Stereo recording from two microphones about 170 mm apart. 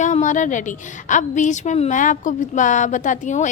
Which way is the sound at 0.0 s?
45° left (ahead or behind).